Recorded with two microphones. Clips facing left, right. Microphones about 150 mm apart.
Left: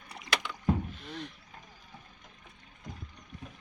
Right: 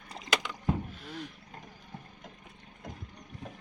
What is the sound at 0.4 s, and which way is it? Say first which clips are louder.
Vehicle: left 2 dB; 5° right (ahead or behind).